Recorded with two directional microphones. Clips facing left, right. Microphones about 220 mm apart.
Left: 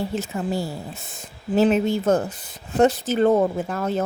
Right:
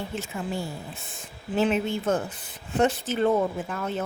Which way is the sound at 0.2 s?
40° left (ahead or behind).